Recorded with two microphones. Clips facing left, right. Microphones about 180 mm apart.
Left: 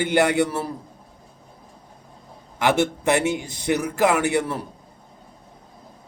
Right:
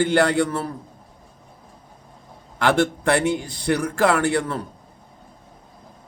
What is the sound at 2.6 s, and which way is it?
A man's voice, 20° left (ahead or behind).